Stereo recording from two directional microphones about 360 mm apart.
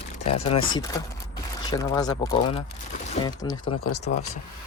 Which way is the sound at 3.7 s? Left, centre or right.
Left.